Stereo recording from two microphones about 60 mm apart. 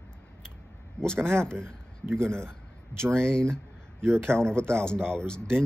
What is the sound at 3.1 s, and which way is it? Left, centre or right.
Speech, centre.